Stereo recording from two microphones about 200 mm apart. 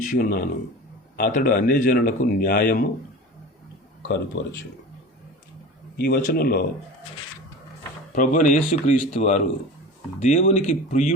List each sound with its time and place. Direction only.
0.0 s speech: 40° left (ahead or behind)
6.0 s speech: 50° left (ahead or behind)
8.1 s speech: 40° left (ahead or behind)